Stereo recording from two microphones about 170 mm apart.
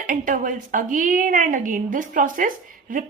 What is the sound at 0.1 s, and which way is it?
A woman's voice, 50° right (ahead or behind).